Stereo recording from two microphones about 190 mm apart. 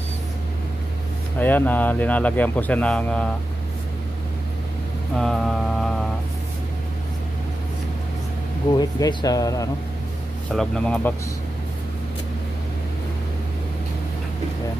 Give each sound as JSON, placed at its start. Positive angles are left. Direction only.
{"t": 1.4, "sound": "speech", "side_deg": 10}
{"t": 5.1, "sound": "mantra", "side_deg": 0}
{"t": 8.7, "sound": "speech", "side_deg": 20}
{"t": 10.5, "sound": "speech", "side_deg": 5}